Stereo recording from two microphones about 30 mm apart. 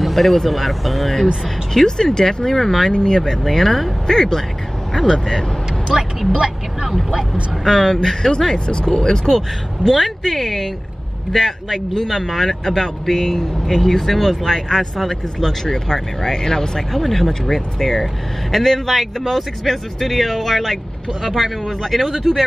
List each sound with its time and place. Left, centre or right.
0.0 s speech: centre
1.9 s speech: left
2.9 s speech: left
3.2 s speech: centre
5.9 s speech: centre
6.3 s speech: right
7.6 s speech: centre
8.6 s speech: left
8.9 s speech: centre
10.0 s speech: centre
15.6 s speech: centre
16.9 s speech: centre
21.2 s speech: centre
21.8 s speech: centre